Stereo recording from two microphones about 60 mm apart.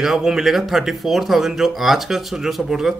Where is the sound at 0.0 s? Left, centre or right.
Centre.